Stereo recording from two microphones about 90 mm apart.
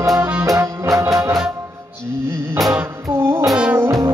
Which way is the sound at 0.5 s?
35° right (ahead or behind).